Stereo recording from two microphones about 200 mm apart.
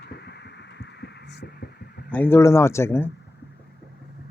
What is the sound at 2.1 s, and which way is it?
Speech, 10° left (ahead or behind).